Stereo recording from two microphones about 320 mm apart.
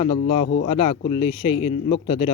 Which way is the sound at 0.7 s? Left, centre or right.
Centre.